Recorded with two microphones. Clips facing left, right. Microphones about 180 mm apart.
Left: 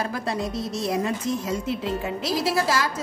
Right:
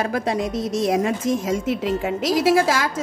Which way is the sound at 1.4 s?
90° right.